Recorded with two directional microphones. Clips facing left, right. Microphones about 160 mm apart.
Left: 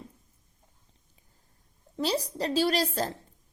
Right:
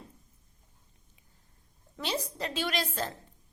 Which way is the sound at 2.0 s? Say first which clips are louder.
Left 5 dB; 35° left (ahead or behind).